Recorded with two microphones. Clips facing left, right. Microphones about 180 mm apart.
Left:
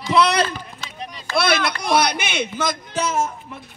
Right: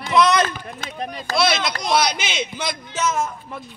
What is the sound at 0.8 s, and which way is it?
Speech, 50° right (ahead or behind).